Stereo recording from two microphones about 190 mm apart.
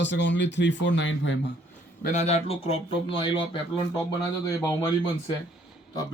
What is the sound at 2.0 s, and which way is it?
Speech, 35° left (ahead or behind).